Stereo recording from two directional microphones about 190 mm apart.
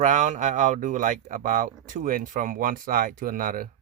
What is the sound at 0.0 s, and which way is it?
Speech, 40° right (ahead or behind).